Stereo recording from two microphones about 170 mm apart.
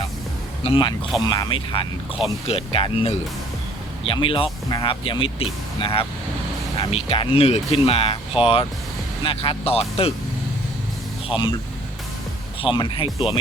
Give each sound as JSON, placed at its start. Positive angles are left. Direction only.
{"t": 0.6, "sound": "speech", "side_deg": 30}
{"t": 12.6, "sound": "speech", "side_deg": 25}